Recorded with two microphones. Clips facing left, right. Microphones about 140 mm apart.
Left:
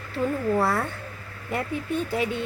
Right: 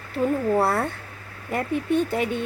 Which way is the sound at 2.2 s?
50° right (ahead or behind).